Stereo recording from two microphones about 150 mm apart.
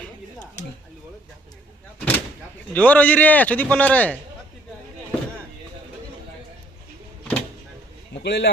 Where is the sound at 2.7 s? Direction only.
10° left (ahead or behind).